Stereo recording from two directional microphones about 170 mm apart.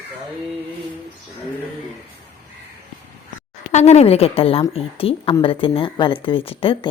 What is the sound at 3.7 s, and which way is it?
A woman's voice, 40° left (ahead or behind).